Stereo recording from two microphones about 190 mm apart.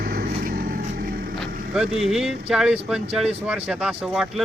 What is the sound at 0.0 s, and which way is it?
Vehicle, 50° right (ahead or behind).